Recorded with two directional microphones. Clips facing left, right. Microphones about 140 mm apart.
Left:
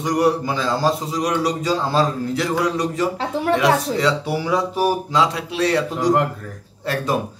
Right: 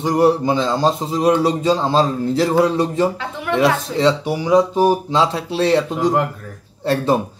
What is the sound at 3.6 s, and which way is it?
A man's voice, 25° right (ahead or behind).